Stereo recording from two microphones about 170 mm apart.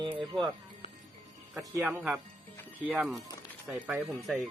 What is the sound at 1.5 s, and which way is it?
Speech, 5° right (ahead or behind).